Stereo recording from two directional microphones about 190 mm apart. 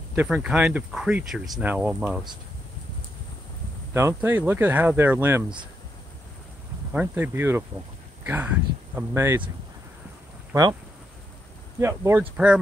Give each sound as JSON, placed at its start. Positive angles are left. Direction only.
{"t": 0.1, "sound": "speech", "side_deg": -5}
{"t": 3.9, "sound": "speech", "side_deg": -10}
{"t": 6.9, "sound": "speech", "side_deg": -10}
{"t": 8.9, "sound": "speech", "side_deg": -15}
{"t": 10.5, "sound": "speech", "side_deg": -20}
{"t": 11.8, "sound": "speech", "side_deg": -15}